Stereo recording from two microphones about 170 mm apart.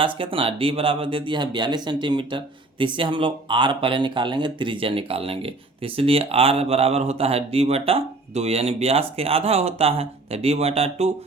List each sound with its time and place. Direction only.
0.0 s speech: 30° right (ahead or behind)